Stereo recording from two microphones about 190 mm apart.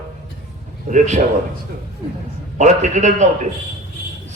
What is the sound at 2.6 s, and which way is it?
Speech, 40° right (ahead or behind).